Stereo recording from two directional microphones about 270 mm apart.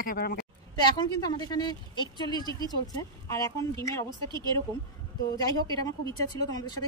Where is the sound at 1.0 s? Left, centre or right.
Centre.